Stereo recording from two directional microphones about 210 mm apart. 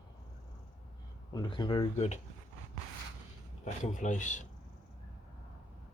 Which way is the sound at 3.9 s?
35° left (ahead or behind).